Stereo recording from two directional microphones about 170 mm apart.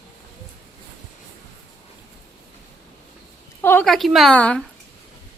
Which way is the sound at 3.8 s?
Centre (ahead or behind).